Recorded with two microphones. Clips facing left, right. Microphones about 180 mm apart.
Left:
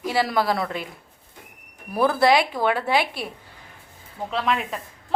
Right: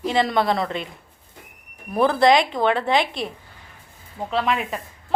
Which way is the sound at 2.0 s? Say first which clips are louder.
Right 2 dB; 5° left (ahead or behind).